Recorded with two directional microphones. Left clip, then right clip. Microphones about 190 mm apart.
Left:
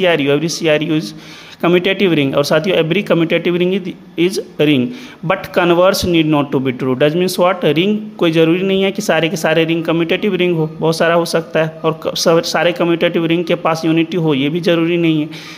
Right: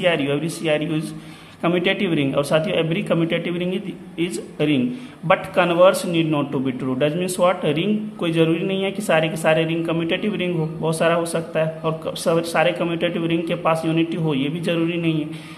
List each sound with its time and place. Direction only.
0.0 s a man's voice: 40° left (ahead or behind)